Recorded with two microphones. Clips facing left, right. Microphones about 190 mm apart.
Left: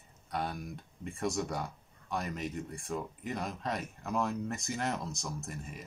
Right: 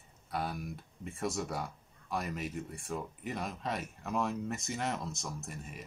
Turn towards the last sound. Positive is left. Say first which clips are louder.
# left 2 dB
turn(degrees=0)  # may be behind; listen again after turning